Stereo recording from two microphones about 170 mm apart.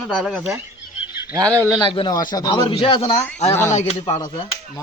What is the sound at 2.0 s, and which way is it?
Speech, 25° left (ahead or behind).